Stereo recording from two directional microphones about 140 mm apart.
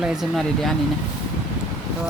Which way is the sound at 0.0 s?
5° right (ahead or behind).